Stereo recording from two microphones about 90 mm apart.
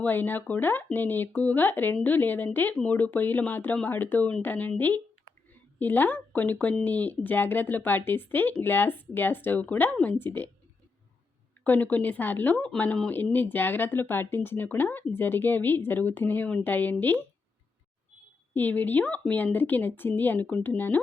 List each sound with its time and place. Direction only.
0.0 s speech: 20° left (ahead or behind)
11.6 s speech: 20° left (ahead or behind)
18.5 s speech: 20° left (ahead or behind)